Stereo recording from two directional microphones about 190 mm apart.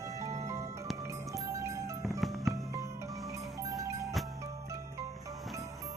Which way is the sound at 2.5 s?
15° right (ahead or behind).